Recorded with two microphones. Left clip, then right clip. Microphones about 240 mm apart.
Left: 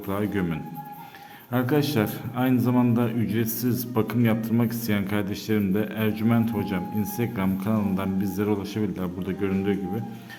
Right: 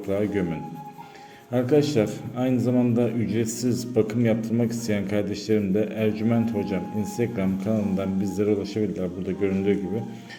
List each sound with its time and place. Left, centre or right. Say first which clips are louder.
0.1 s a man's voice: right 3 dB; centre
1.5 s a man's voice: right 3 dB; centre